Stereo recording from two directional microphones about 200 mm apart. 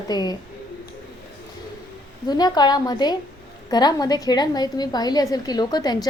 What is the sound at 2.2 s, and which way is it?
A woman's voice, 20° left (ahead or behind).